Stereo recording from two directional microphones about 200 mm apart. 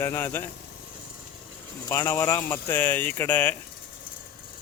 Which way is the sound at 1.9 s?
15° left (ahead or behind).